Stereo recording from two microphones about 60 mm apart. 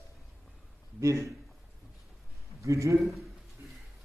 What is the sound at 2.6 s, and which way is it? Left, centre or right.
Speech, right.